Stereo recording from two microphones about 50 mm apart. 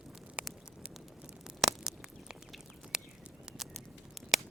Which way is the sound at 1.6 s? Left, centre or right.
Centre.